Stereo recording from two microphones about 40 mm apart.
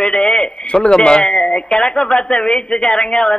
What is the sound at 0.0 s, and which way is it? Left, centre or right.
Radio, left.